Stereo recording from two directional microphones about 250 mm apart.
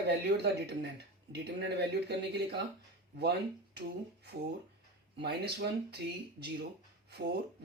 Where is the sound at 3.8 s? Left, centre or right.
Right.